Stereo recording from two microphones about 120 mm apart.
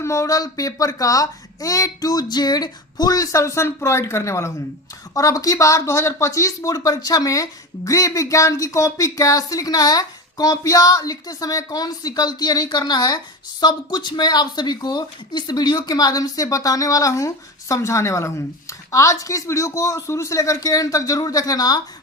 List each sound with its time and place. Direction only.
0.0 s speech: 25° left (ahead or behind)